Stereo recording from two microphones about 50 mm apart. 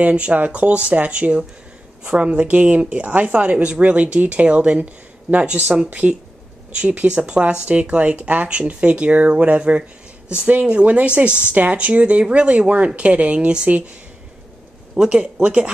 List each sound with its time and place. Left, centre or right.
0.1 s speech: right
15.0 s speech: right